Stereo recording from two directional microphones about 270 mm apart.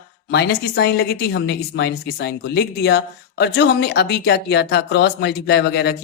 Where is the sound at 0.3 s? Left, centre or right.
Left.